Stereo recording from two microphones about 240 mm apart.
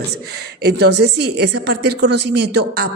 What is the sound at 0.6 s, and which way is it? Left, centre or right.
A woman's voice, right.